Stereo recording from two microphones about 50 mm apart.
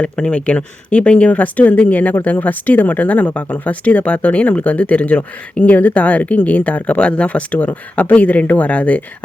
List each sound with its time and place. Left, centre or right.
0.0 s speech: left